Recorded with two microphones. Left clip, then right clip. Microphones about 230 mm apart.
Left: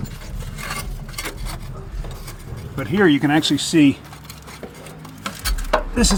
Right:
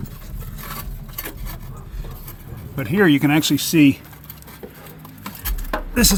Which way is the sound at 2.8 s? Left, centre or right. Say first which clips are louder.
Even; right.